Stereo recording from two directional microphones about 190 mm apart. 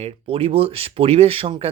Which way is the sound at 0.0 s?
30° right (ahead or behind).